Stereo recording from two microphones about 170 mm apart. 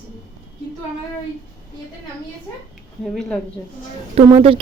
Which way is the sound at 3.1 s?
Centre (ahead or behind).